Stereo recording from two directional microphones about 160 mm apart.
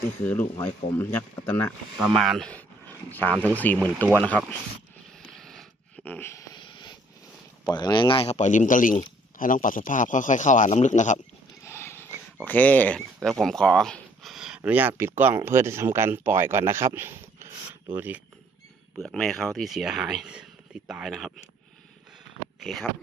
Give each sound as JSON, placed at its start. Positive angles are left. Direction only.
{"t": 0.2, "sound": "speech", "side_deg": 10}
{"t": 2.0, "sound": "speech", "side_deg": 0}
{"t": 5.3, "sound": "a sound", "side_deg": 5}
{"t": 6.1, "sound": "a sound", "side_deg": 15}
{"t": 7.6, "sound": "speech", "side_deg": 25}
{"t": 11.6, "sound": "a sound", "side_deg": 15}
{"t": 12.5, "sound": "speech", "side_deg": 10}
{"t": 18.9, "sound": "speech", "side_deg": 0}
{"t": 22.6, "sound": "speech", "side_deg": 0}